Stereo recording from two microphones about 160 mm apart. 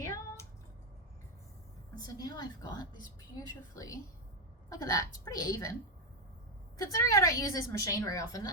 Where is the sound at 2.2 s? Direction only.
25° left (ahead or behind).